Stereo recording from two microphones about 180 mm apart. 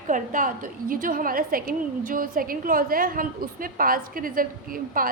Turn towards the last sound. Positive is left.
turn(degrees=-50)  # may be behind; listen again after turning